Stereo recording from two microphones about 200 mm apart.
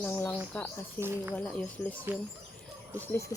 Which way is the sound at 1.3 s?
5° left (ahead or behind).